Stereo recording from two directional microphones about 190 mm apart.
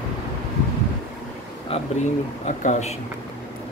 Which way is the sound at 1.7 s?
40° left (ahead or behind).